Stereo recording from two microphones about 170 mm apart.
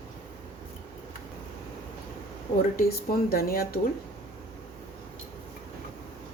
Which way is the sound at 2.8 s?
60° left (ahead or behind).